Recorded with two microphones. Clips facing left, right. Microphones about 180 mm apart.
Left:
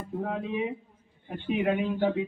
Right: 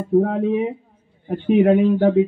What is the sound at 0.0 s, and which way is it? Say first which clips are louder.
Speech: right 14 dB; 55° right (ahead or behind).